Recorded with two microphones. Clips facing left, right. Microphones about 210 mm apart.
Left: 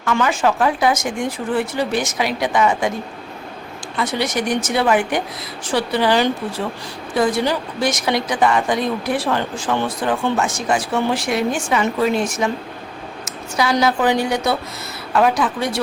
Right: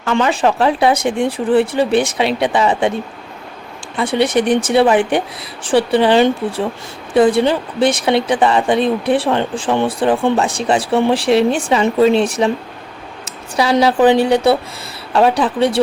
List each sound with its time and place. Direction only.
0.0 s speech: 25° right (ahead or behind)
4.6 s speech: 30° right (ahead or behind)
10.0 s speech: 30° right (ahead or behind)
13.6 s speech: 30° right (ahead or behind)